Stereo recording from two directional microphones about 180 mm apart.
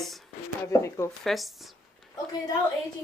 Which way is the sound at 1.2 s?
Centre (ahead or behind).